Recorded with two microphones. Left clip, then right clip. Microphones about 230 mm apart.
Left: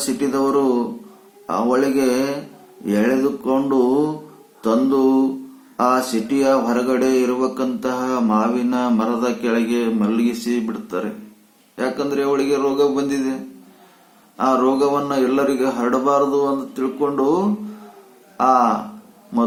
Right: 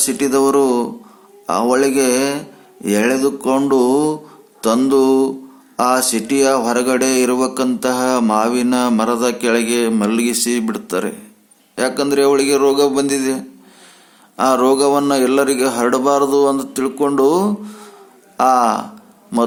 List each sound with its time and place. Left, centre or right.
0.0 s speech: right
14.3 s speech: right